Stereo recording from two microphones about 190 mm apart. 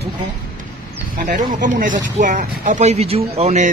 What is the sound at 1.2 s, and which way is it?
Speech, 45° right (ahead or behind).